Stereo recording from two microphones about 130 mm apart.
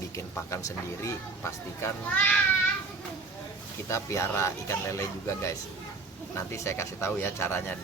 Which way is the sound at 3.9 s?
25° left (ahead or behind).